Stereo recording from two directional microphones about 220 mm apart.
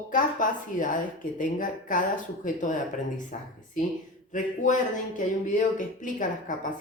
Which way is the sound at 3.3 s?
35° left (ahead or behind).